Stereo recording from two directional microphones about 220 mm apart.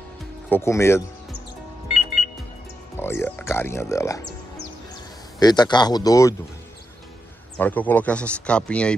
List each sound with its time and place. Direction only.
0.5 s speech: 10° left (ahead or behind)
3.0 s speech: 10° left (ahead or behind)
5.4 s speech: 20° left (ahead or behind)
7.5 s speech: 5° left (ahead or behind)